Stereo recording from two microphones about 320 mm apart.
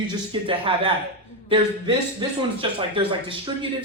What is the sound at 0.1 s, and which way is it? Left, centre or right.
Speech, centre.